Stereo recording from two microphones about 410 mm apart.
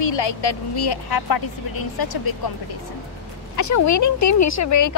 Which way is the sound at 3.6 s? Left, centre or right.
Left.